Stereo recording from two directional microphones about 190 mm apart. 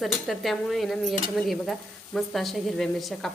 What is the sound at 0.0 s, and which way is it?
Speech, centre (ahead or behind).